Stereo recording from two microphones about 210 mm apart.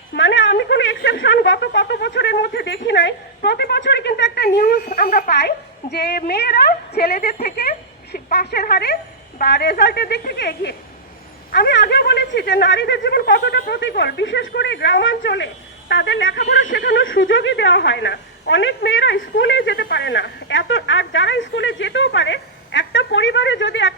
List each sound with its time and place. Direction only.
0.1 s speech: 60° left (ahead or behind)